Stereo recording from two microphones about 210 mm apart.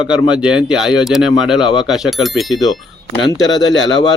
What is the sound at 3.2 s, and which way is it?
Speech, 20° left (ahead or behind).